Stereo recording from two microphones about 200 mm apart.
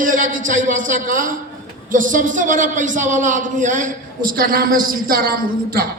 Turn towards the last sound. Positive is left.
turn(degrees=-45)  # may be behind; listen again after turning